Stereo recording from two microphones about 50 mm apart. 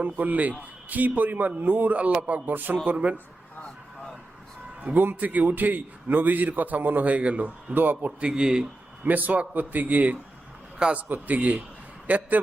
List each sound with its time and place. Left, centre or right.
0.0 s a man's voice: right
4.8 s a man's voice: right
8.4 s speech: centre
9.0 s a man's voice: right